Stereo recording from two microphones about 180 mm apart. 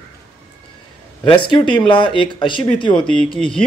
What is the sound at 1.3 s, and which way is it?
Speech, 25° left (ahead or behind).